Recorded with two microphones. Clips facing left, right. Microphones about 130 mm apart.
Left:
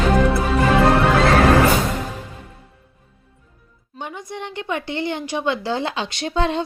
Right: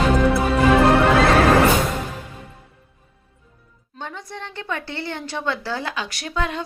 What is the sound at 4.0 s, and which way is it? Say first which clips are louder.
A woman's voice: left 3 dB; 15° left (ahead or behind).